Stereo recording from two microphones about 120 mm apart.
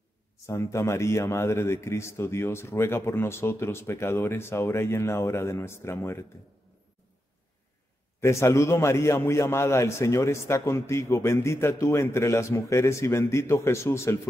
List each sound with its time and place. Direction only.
0.5 s a man's voice: 25° left (ahead or behind)
8.2 s a man's voice: 25° left (ahead or behind)